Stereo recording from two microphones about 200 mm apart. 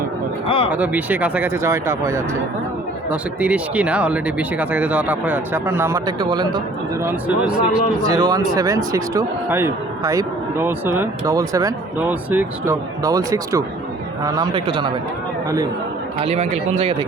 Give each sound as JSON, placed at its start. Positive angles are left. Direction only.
{"t": 0.4, "sound": "speech", "side_deg": 25}
{"t": 0.7, "sound": "speech", "side_deg": -5}
{"t": 7.0, "sound": "speech", "side_deg": -10}
{"t": 8.0, "sound": "speech", "side_deg": -20}
{"t": 16.2, "sound": "speech", "side_deg": -30}